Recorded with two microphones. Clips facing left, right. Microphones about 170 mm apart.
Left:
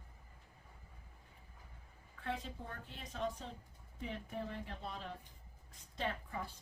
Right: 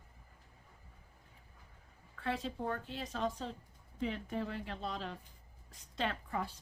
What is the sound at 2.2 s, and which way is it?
A woman's voice, 90° right.